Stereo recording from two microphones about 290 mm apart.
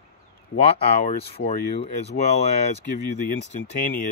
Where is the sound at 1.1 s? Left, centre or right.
Left.